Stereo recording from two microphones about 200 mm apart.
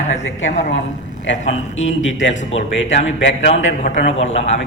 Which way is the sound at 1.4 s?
35° left (ahead or behind).